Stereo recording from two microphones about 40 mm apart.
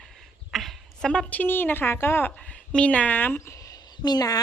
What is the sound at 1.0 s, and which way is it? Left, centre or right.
Speech, centre.